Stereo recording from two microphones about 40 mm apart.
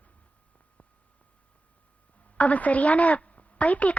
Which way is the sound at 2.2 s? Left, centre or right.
Left.